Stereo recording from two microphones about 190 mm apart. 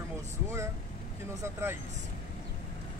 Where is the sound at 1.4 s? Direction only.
10° right (ahead or behind).